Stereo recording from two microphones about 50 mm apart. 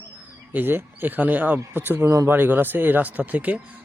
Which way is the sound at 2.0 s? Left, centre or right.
Right.